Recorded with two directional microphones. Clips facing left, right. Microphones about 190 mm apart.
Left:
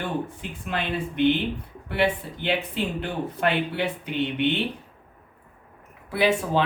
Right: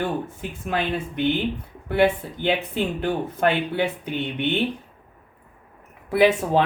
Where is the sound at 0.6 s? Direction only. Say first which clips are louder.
Right 3 dB; 45° right (ahead or behind).